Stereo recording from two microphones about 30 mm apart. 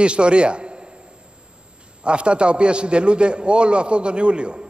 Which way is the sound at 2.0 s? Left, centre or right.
Right.